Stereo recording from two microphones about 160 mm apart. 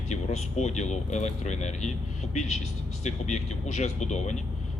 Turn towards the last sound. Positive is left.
turn(degrees=45)  # may be behind; listen again after turning